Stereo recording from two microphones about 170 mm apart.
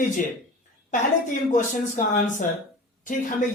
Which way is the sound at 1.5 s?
50° left (ahead or behind).